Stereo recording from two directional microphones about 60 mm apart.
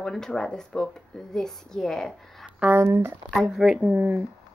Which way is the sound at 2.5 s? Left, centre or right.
Right.